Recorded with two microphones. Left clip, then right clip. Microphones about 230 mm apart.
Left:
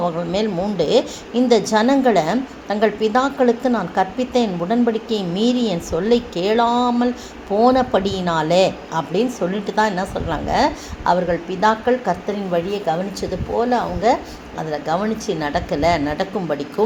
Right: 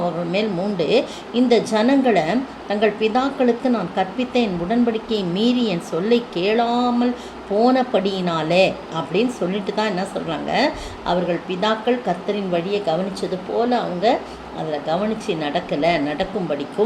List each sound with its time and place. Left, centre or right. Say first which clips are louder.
0.3 s a woman's voice: left 1 dB; left